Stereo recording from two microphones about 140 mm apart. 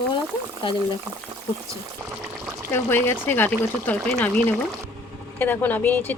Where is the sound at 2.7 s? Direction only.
15° left (ahead or behind).